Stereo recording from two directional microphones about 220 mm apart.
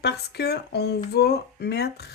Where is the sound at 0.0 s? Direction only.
50° left (ahead or behind).